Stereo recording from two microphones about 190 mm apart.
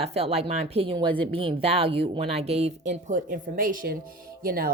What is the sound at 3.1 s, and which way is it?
A woman's voice, 45° right (ahead or behind).